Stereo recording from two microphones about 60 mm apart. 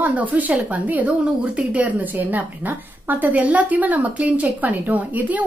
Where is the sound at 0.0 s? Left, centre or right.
Right.